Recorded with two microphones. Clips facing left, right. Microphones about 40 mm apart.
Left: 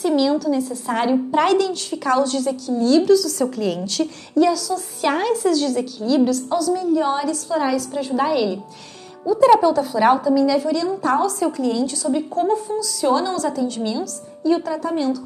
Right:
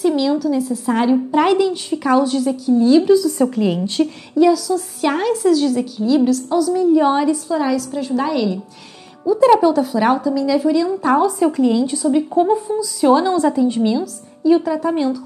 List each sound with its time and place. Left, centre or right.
0.0 s a woman's voice: centre
1.5 s a woman's voice: centre
4.4 s a woman's voice: centre
7.4 s a woman's voice: centre; by 14.0 s right
14.4 s a woman's voice: centre